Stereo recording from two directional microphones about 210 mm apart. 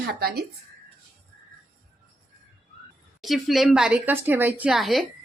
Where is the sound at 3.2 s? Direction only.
Centre (ahead or behind).